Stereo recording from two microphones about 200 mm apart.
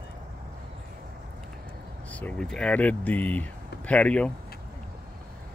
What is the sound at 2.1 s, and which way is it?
Speech, 5° left (ahead or behind).